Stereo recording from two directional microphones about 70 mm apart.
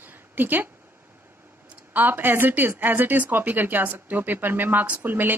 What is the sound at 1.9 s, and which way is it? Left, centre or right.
Speech, right.